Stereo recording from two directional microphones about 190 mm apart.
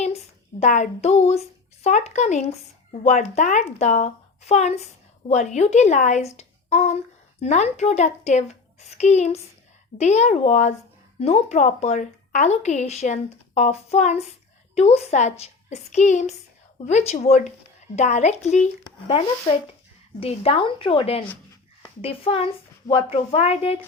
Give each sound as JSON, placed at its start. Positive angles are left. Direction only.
{"t": 0.6, "sound": "a woman's voice", "side_deg": 40}